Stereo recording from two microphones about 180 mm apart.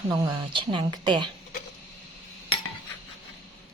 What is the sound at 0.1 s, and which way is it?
Speech, 25° right (ahead or behind).